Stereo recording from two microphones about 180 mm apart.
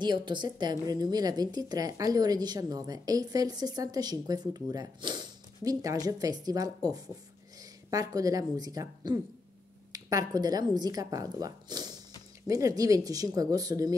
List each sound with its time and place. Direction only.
0.0 s a woman's voice: 25° right (ahead or behind)